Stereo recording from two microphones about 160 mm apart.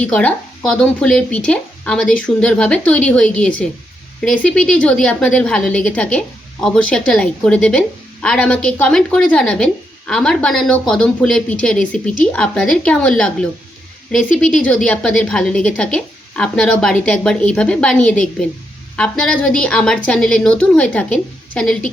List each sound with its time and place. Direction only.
0.0 s a woman's voice: 10° left (ahead or behind)